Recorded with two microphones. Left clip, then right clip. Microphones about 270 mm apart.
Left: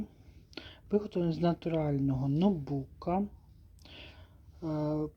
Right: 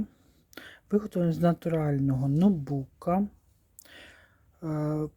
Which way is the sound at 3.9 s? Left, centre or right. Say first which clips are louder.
Right 1 dB; right.